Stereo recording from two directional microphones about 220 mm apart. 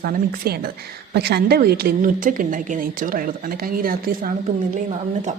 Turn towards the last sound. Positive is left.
turn(degrees=-40)  # may be behind; listen again after turning